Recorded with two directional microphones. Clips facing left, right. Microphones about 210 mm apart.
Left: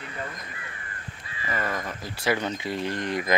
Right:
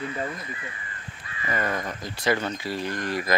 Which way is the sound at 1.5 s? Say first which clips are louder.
Right 2 dB; centre (ahead or behind).